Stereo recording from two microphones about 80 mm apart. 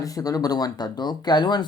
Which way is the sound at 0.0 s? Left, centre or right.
Left.